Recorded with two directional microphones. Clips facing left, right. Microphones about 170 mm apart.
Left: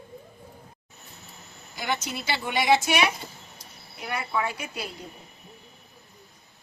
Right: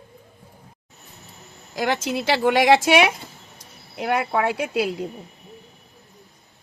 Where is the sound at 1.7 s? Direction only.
90° right.